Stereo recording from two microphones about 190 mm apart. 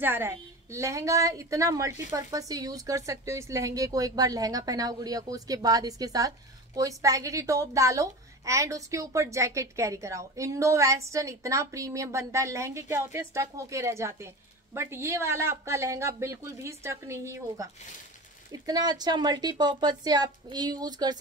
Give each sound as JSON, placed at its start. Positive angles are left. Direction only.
{"t": 0.0, "sound": "a woman's voice", "side_deg": -10}